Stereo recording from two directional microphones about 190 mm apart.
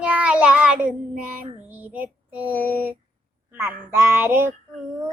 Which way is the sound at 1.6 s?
10° right (ahead or behind).